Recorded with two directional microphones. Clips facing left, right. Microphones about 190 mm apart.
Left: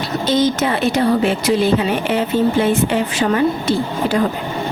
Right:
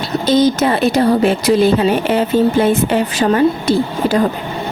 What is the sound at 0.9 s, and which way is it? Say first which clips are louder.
Speech: right 3 dB; 40° right (ahead or behind).